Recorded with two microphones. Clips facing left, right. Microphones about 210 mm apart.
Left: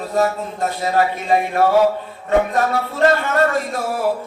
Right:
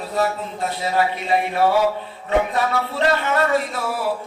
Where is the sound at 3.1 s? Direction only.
45° left (ahead or behind).